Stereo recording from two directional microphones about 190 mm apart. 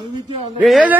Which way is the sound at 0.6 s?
Centre (ahead or behind).